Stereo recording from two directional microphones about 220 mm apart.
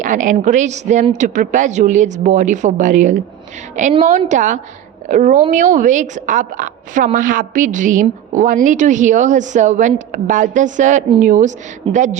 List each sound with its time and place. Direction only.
0.0 s a woman's voice: 35° right (ahead or behind)